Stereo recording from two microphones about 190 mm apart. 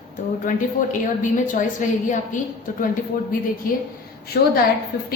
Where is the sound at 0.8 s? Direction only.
45° left (ahead or behind).